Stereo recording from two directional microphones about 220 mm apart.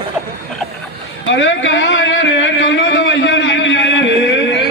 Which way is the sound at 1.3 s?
55° left (ahead or behind).